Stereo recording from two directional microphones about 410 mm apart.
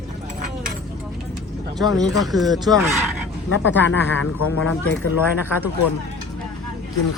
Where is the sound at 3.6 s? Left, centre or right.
Left.